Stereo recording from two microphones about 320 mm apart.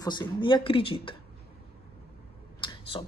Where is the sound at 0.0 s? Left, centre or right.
Centre.